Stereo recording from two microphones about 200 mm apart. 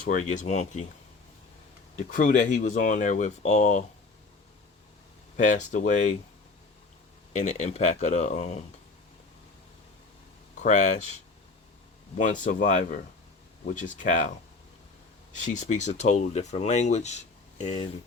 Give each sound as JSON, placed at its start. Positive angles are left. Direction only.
{"t": 0.0, "sound": "speech", "side_deg": 40}
{"t": 2.0, "sound": "speech", "side_deg": 40}
{"t": 5.4, "sound": "speech", "side_deg": 40}
{"t": 7.3, "sound": "speech", "side_deg": 35}
{"t": 10.6, "sound": "speech", "side_deg": 35}